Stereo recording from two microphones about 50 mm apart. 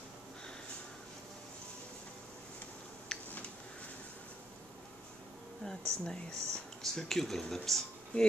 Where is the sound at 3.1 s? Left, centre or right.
Centre.